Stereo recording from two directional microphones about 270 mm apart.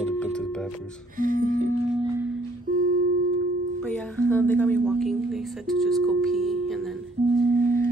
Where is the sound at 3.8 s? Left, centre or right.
Centre.